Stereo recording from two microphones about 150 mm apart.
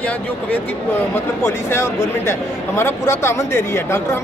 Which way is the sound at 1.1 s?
20° left (ahead or behind).